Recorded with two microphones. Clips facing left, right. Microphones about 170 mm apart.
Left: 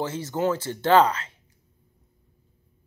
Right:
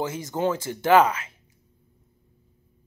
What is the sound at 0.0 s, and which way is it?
Speech, 15° right (ahead or behind).